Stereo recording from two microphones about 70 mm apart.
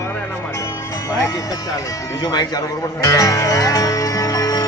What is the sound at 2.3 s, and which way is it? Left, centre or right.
Speech, left.